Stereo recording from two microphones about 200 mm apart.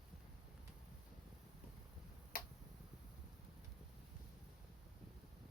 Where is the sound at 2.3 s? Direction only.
45° left (ahead or behind).